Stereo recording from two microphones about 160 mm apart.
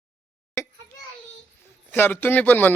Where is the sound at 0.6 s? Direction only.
15° left (ahead or behind).